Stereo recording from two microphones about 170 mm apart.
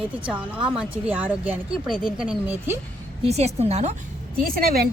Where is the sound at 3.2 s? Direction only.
40° right (ahead or behind).